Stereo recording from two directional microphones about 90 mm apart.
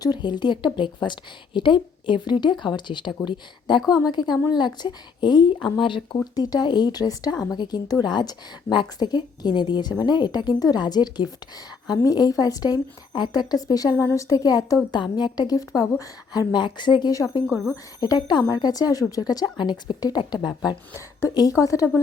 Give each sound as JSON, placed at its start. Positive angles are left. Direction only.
{"t": 0.0, "sound": "a woman's voice", "side_deg": 55}
{"t": 6.3, "sound": "a woman's voice", "side_deg": 45}
{"t": 14.9, "sound": "a woman's voice", "side_deg": 55}
{"t": 16.5, "sound": "a woman's voice", "side_deg": 60}
{"t": 17.4, "sound": "a woman's voice", "side_deg": 0}
{"t": 18.0, "sound": "a woman's voice", "side_deg": 50}
{"t": 21.6, "sound": "a woman's voice", "side_deg": 35}